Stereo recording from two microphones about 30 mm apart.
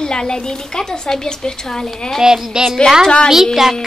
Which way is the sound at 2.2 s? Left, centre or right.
Right.